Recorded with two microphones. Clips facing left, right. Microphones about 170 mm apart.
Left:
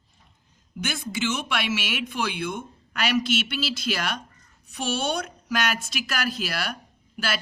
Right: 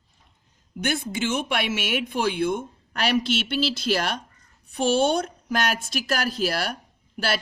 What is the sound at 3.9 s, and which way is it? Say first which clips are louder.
A woman's voice: right 5 dB; 50° right (ahead or behind).